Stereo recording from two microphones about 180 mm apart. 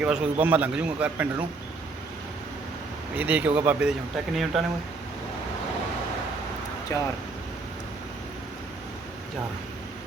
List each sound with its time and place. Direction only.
0.0 s a man's voice: 5° right (ahead or behind)
3.2 s a man's voice: 10° right (ahead or behind)
6.9 s speech: 15° left (ahead or behind)